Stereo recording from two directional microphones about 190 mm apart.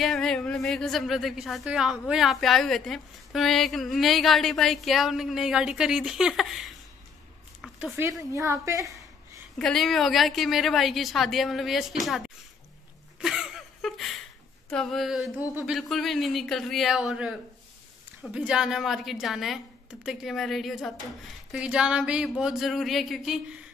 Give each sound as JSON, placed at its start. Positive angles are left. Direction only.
{"t": 0.0, "sound": "a woman's voice", "side_deg": 5}
{"t": 9.6, "sound": "a woman's voice", "side_deg": 0}
{"t": 13.2, "sound": "a sound", "side_deg": 0}
{"t": 14.7, "sound": "a woman's voice", "side_deg": 0}